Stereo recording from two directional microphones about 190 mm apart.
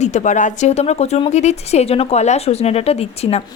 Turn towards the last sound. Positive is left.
turn(degrees=35)  # may be behind; listen again after turning